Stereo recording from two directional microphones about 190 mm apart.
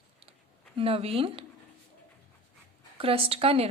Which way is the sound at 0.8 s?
30° right (ahead or behind).